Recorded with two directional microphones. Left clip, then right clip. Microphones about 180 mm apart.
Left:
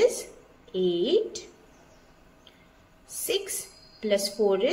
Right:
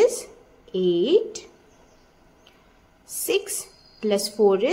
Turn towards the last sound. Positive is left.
turn(degrees=-50)  # may be behind; listen again after turning